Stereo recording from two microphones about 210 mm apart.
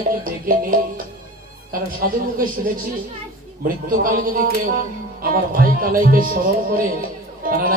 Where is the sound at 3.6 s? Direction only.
40° right (ahead or behind).